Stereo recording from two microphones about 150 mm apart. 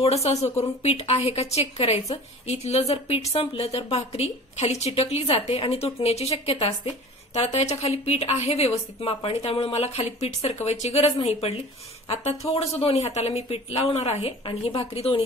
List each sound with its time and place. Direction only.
0.0 s a woman's voice: 45° left (ahead or behind)